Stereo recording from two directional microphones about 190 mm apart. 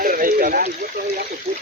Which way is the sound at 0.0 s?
45° right (ahead or behind).